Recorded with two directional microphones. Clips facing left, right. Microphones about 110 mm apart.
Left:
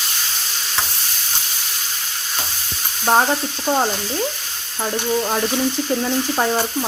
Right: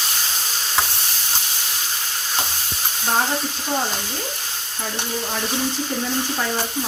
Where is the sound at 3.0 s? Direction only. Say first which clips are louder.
Left 6 dB; 55° left (ahead or behind).